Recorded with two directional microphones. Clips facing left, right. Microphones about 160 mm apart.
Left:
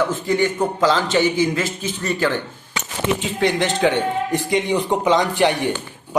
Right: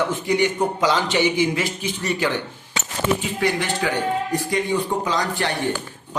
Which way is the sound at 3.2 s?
20° left (ahead or behind).